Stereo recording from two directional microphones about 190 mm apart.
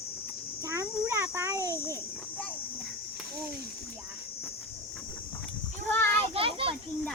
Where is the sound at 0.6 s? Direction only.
15° right (ahead or behind).